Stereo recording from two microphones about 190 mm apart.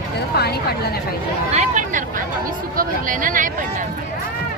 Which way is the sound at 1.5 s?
40° right (ahead or behind).